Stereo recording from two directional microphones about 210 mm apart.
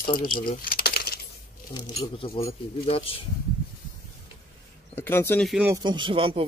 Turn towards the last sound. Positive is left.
turn(degrees=-25)  # may be behind; listen again after turning